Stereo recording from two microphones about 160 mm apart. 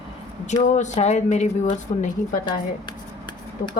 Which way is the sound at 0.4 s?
50° left (ahead or behind).